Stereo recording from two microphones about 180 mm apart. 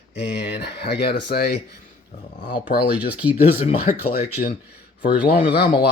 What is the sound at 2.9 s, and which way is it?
Speech, 10° right (ahead or behind).